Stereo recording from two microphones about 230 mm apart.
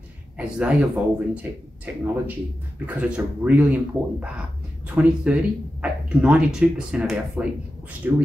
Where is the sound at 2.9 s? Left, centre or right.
Centre.